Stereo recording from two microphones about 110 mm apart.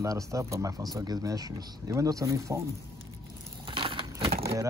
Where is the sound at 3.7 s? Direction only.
50° right (ahead or behind).